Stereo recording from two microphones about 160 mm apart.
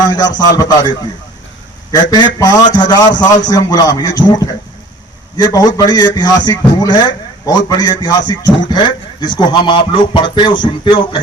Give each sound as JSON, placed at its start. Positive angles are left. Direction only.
{"t": 0.0, "sound": "a man's voice", "side_deg": 25}